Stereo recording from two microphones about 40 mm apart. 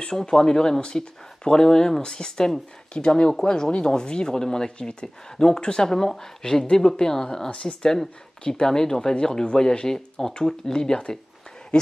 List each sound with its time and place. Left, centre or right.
0.1 s speech: centre